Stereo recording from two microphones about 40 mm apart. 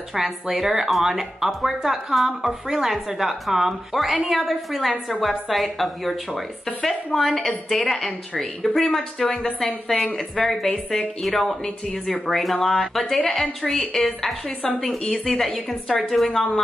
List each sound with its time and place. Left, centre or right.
0.1 s a woman's voice: centre
10.7 s a woman's voice: left
11.2 s a woman's voice: centre
15.3 s a woman's voice: centre